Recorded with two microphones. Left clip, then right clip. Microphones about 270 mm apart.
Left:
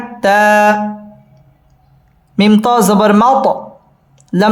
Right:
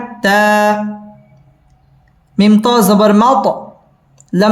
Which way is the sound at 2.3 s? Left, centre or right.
Centre.